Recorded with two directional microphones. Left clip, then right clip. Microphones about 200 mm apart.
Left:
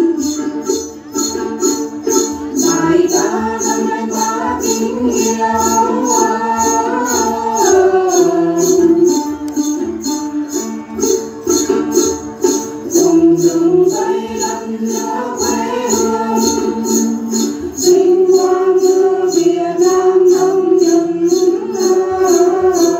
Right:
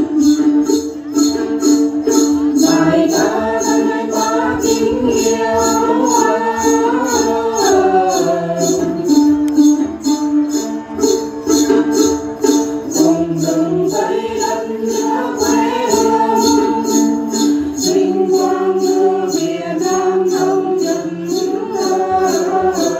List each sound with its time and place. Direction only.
1.2 s music: 30° left (ahead or behind)
7.7 s dog: 30° right (ahead or behind)
9.0 s music: 30° left (ahead or behind)
11.6 s music: 30° left (ahead or behind)
15.4 s music: 30° left (ahead or behind)